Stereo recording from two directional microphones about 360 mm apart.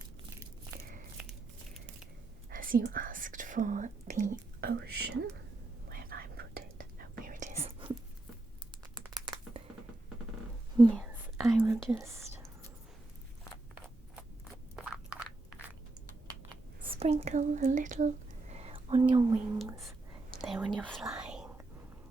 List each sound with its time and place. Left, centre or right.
0.8 s biting: right
2.5 s speech: right
5.9 s whispering: right
9.0 s crumpling: centre
10.8 s whispering: centre
14.8 s a sound: centre
16.9 s speech: centre
19.5 s speech: centre
21.0 s whispering: centre